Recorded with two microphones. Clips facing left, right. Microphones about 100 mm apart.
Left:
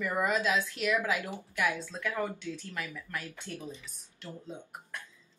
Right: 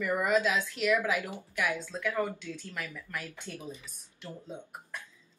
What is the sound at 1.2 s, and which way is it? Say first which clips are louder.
Speech: left 1 dB; 15° left (ahead or behind).